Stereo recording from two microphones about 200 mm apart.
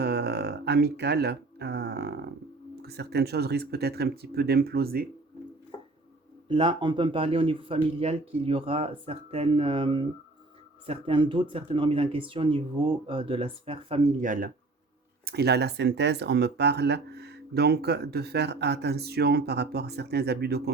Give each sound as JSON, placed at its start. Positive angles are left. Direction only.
{"t": 0.0, "sound": "a sound", "side_deg": -55}
{"t": 2.7, "sound": "speech", "side_deg": -55}
{"t": 6.5, "sound": "a man's voice", "side_deg": -25}
{"t": 14.2, "sound": "speech", "side_deg": -45}